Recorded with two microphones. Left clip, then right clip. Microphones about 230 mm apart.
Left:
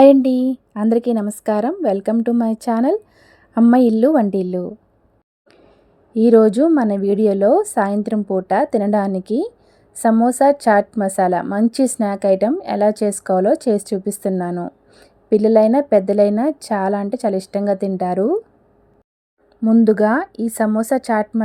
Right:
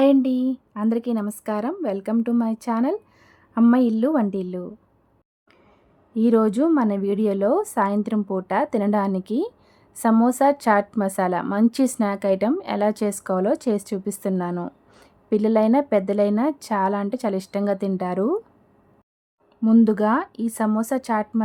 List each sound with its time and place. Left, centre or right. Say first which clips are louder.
0.0 s a woman's voice: left 8 dB; centre
6.1 s a woman's voice: left 8 dB; centre
19.6 s a woman's voice: left 5 dB; centre